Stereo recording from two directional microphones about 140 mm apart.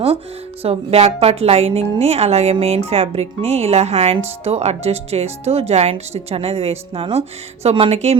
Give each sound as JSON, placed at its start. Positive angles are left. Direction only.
{"t": 0.6, "sound": "a woman's voice", "side_deg": -45}